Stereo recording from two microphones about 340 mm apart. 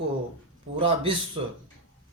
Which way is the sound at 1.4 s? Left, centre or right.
Centre.